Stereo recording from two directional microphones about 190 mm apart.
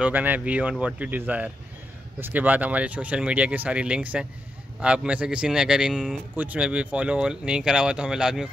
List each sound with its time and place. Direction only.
0.0 s speech: 10° right (ahead or behind)